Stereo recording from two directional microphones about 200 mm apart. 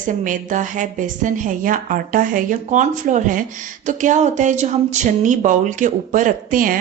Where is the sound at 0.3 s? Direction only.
40° right (ahead or behind).